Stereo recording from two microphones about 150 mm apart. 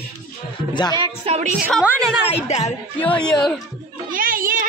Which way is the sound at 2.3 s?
45° left (ahead or behind).